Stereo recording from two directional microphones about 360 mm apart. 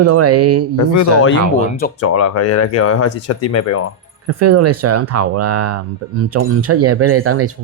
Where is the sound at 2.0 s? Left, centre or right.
Left.